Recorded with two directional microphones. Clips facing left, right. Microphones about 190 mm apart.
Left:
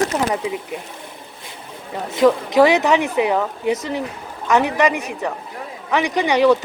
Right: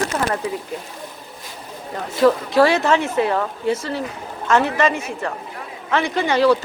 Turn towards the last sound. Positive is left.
turn(degrees=15)  # may be behind; listen again after turning